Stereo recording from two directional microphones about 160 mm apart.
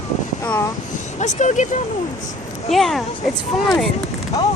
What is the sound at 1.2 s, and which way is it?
Speech, 50° left (ahead or behind).